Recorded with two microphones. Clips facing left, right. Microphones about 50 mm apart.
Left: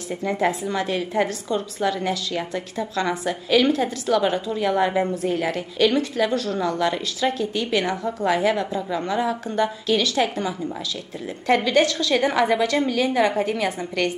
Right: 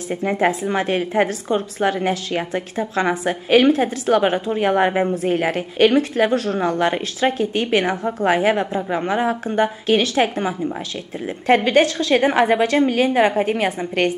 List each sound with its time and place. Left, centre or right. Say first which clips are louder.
0.1 s a woman's voice: right 3 dB; right